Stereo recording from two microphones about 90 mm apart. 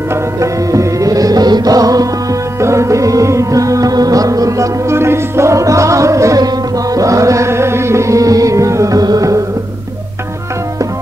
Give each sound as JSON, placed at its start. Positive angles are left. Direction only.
{"t": 0.1, "sound": "music", "side_deg": -35}